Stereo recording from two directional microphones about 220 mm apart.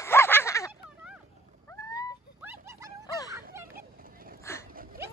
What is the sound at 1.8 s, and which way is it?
Dog, 15° left (ahead or behind).